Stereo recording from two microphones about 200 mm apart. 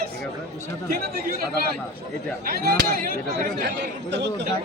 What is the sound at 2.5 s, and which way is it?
Speech, 50° right (ahead or behind).